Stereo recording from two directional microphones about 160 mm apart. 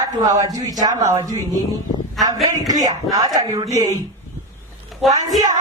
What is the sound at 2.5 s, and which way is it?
Speech, 20° right (ahead or behind).